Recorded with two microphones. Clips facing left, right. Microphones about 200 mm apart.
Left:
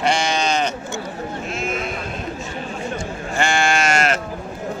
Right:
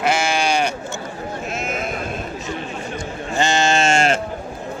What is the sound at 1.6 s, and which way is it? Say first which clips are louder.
Sheep: left 2 dB; 45° right (ahead or behind).